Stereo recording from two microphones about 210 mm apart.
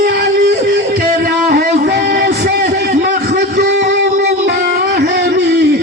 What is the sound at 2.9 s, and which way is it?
Music, 40° right (ahead or behind).